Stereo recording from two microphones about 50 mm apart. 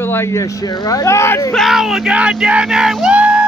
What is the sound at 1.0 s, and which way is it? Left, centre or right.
Speech, left.